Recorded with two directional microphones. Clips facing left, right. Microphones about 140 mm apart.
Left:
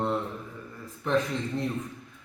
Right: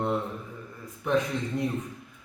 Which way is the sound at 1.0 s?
15° right (ahead or behind).